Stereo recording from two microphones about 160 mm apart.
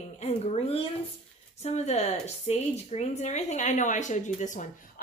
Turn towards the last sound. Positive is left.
turn(degrees=50)  # may be behind; listen again after turning